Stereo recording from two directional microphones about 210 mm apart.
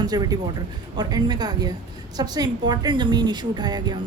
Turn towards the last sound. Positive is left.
turn(degrees=-20)  # may be behind; listen again after turning